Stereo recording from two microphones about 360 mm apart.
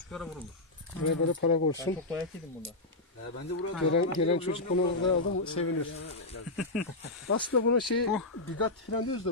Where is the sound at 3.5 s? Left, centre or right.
Left.